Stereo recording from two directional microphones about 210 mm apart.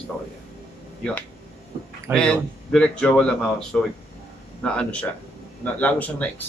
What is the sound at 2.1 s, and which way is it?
A man's voice, 5° left (ahead or behind).